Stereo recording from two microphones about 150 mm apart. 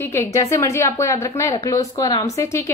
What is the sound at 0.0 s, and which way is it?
A woman's voice, 15° left (ahead or behind).